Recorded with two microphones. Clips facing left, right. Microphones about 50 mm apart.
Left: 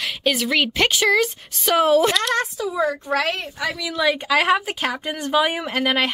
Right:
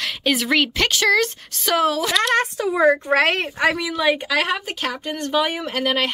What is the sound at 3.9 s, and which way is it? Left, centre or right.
Speech, centre.